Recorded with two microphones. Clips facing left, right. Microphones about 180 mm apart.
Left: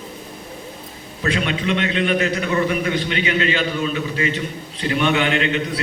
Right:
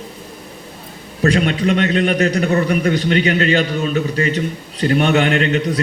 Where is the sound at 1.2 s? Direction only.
45° right (ahead or behind).